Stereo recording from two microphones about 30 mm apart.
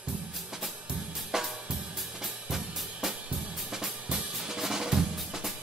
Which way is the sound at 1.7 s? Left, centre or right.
Centre.